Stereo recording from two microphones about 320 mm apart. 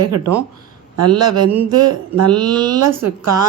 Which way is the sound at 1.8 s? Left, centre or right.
Right.